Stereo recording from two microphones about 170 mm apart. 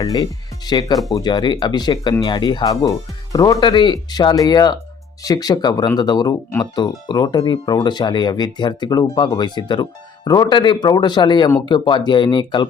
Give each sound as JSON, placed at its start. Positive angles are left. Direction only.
{"t": 0.0, "sound": "speech", "side_deg": 20}